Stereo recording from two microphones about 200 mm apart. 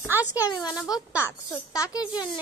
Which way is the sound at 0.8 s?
15° left (ahead or behind).